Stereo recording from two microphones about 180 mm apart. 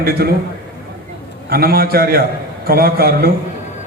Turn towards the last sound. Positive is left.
turn(degrees=-60)  # may be behind; listen again after turning